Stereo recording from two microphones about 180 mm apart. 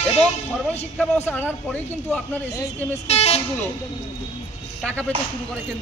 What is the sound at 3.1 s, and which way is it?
Speech, 35° left (ahead or behind).